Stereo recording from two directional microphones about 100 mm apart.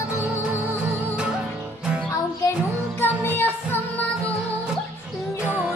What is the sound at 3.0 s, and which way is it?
Music, 20° left (ahead or behind).